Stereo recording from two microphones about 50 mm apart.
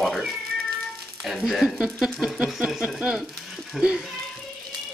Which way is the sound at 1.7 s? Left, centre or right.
Centre.